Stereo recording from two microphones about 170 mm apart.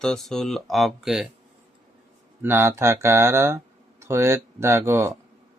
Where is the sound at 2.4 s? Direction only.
15° right (ahead or behind).